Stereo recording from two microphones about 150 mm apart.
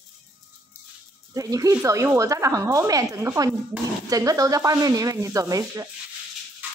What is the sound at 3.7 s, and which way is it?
Speech, 10° right (ahead or behind).